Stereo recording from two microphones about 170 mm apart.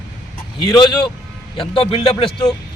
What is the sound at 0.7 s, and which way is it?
A man's voice, 25° left (ahead or behind).